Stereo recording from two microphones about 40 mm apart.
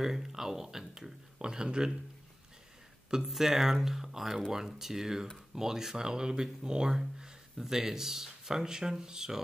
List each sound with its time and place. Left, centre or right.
0.0 s speech: centre
1.4 s speech: right
3.3 s speech: centre